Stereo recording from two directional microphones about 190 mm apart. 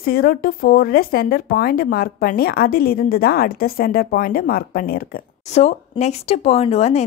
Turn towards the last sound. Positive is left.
turn(degrees=35)  # may be behind; listen again after turning